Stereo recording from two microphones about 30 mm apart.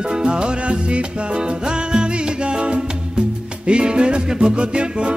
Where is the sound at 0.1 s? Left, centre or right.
Right.